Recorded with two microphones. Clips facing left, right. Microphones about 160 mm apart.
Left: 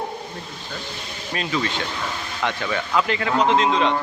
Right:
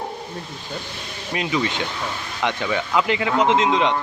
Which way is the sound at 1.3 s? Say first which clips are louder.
Right 2 dB; 15° right (ahead or behind).